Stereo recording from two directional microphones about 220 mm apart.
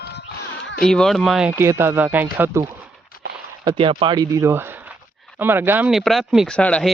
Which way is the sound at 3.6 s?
25° right (ahead or behind).